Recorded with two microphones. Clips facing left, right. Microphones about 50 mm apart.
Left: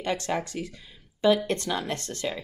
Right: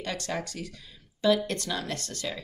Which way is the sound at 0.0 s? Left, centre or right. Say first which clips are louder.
Left 5 dB; left.